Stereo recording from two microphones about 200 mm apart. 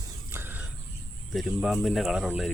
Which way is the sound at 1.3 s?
Centre (ahead or behind).